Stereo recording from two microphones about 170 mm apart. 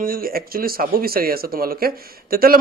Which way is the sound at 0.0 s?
60° right (ahead or behind).